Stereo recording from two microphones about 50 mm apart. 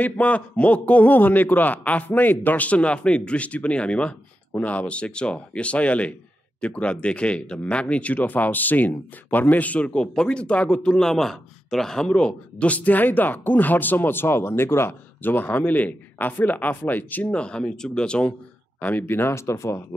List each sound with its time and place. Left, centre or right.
0.0 s speech: left
10.9 s speech: centre; by 15.0 s left
15.2 s speech: left
17.4 s speech: centre
18.8 s speech: left
19.3 s speech: left